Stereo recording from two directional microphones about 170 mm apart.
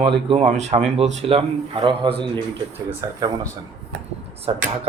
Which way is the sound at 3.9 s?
90° right.